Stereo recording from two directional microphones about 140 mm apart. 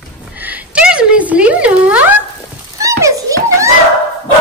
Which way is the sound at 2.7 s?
25° right (ahead or behind).